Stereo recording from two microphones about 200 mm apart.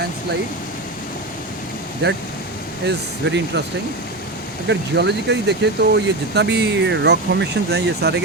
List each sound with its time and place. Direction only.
2.0 s speech: 55° right (ahead or behind)
4.7 s speech: 60° right (ahead or behind)